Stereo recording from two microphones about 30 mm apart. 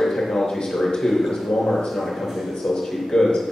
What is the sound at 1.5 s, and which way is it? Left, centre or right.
Speech, centre.